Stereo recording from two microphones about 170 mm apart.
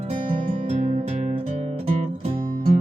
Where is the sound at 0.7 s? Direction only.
45° right (ahead or behind).